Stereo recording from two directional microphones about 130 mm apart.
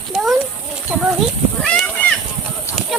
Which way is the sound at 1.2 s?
Centre (ahead or behind).